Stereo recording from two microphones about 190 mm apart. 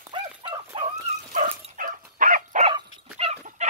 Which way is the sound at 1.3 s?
45° right (ahead or behind).